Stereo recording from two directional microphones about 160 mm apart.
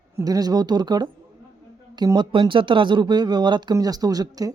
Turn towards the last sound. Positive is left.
turn(degrees=-25)  # may be behind; listen again after turning